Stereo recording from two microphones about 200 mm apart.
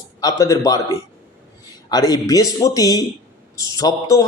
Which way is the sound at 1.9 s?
20° left (ahead or behind).